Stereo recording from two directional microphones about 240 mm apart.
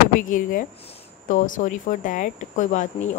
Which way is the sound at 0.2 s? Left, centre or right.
Left.